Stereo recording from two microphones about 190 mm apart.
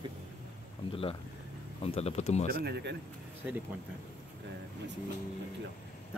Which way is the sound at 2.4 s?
55° right (ahead or behind).